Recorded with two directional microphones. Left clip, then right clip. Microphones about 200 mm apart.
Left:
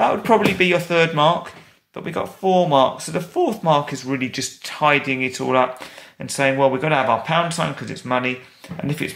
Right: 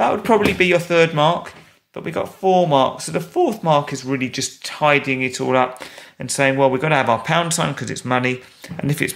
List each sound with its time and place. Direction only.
0.0 s speech: 25° right (ahead or behind)